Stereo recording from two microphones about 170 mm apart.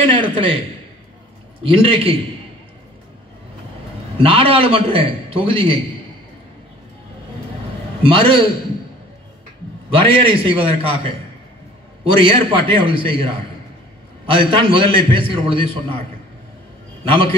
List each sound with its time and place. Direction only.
0.1 s a man's voice: 30° right (ahead or behind)
1.6 s a man's voice: 30° right (ahead or behind)
4.2 s a man's voice: 35° right (ahead or behind)
8.1 s a man's voice: 30° right (ahead or behind)
10.0 s a man's voice: 30° right (ahead or behind)
17.0 s a man's voice: 30° right (ahead or behind)